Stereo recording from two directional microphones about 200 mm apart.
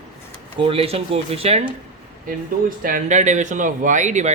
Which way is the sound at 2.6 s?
45° right (ahead or behind).